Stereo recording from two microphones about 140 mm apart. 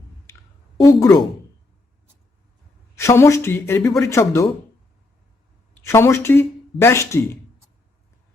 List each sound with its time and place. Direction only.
0.8 s speech: 25° left (ahead or behind)
2.9 s speech: 20° left (ahead or behind)
5.7 s speech: 20° left (ahead or behind)